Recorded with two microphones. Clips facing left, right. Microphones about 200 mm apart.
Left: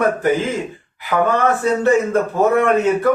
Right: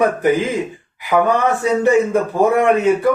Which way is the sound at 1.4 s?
15° right (ahead or behind).